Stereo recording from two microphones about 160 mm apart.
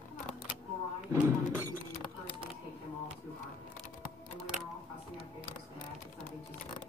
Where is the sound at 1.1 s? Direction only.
15° right (ahead or behind).